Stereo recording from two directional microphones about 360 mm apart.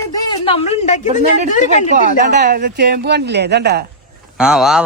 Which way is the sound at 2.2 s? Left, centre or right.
Right.